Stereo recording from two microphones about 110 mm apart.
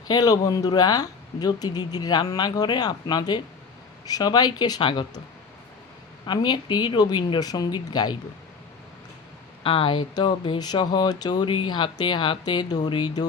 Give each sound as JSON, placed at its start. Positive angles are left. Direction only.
{"t": 0.1, "sound": "speech", "side_deg": 35}
{"t": 6.2, "sound": "speech", "side_deg": 40}
{"t": 9.6, "sound": "speech", "side_deg": 50}